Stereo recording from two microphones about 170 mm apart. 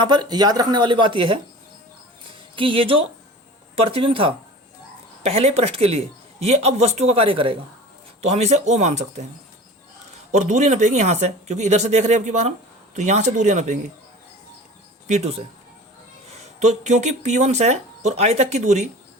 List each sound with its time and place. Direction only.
0.0 s speech: 25° right (ahead or behind)
2.6 s speech: 30° right (ahead or behind)
10.3 s speech: 45° right (ahead or behind)
15.0 s speech: 40° right (ahead or behind)
16.6 s speech: 45° right (ahead or behind)